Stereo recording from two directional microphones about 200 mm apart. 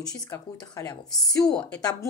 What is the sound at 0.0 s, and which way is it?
A woman's voice, 20° left (ahead or behind).